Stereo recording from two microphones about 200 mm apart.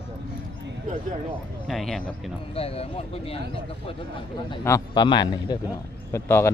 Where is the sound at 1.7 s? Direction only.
Centre (ahead or behind).